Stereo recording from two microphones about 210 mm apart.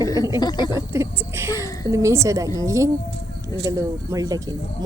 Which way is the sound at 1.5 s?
15° left (ahead or behind).